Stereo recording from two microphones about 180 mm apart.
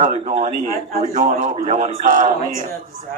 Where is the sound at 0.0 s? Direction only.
40° right (ahead or behind).